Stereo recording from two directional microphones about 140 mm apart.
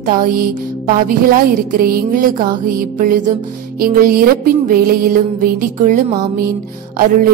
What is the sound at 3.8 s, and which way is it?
Music, 90° right.